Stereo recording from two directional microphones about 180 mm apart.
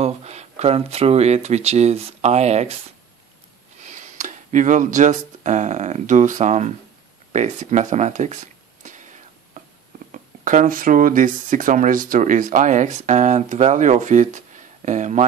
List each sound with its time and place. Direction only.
0.0 s speech: 35° right (ahead or behind)
3.8 s speech: 40° right (ahead or behind)
9.6 s a sound: 45° right (ahead or behind)
10.1 s speech: 45° right (ahead or behind)